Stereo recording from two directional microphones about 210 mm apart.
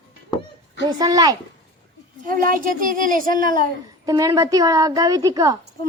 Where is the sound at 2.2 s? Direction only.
40° right (ahead or behind).